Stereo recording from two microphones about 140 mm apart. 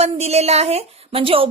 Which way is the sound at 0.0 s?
50° right (ahead or behind).